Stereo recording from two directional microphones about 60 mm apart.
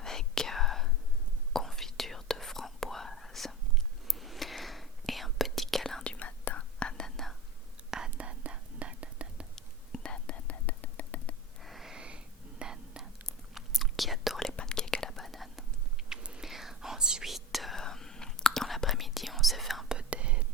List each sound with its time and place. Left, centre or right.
0.0 s whispering: centre
6.1 s whispering: left; by 7.3 s centre
7.9 s whispering: centre
8.2 s whispering: right
9.6 s whispering: centre
11.6 s a sound: centre
11.9 s whispering: centre
14.5 s whispering: centre
16.0 s whispering: centre
19.9 s whispering: centre